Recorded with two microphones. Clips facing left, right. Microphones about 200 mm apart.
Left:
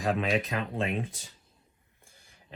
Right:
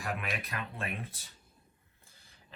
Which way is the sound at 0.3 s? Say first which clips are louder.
Left 10 dB; 15° left (ahead or behind).